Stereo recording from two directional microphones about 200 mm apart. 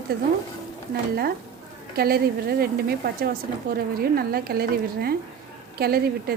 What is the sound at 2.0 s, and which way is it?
Speech, 50° right (ahead or behind).